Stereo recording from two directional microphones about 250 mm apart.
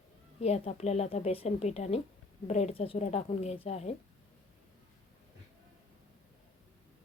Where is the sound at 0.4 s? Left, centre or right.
Left.